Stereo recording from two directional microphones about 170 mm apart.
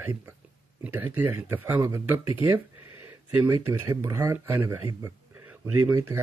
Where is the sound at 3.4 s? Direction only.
15° right (ahead or behind).